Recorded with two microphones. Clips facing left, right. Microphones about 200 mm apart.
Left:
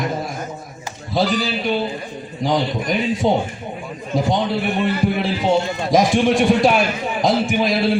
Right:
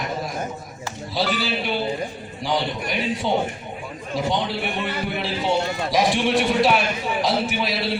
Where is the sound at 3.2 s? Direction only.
40° left (ahead or behind).